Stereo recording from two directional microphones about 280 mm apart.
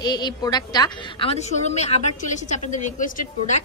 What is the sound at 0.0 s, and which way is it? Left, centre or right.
A woman's voice, centre.